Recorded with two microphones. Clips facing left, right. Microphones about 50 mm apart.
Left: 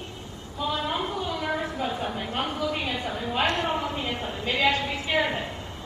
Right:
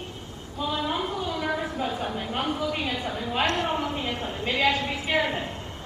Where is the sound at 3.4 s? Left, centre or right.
Centre.